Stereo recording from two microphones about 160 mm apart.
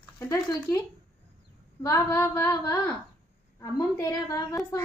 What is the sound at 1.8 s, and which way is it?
Speech, 15° left (ahead or behind).